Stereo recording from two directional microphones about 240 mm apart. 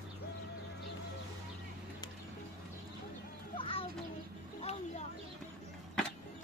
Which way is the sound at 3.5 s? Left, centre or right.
Left.